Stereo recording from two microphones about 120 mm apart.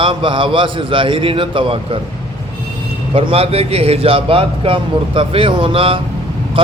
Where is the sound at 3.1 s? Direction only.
50° right (ahead or behind).